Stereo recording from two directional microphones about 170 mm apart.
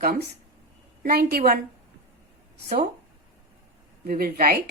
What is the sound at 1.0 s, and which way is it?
Speech, 65° right (ahead or behind).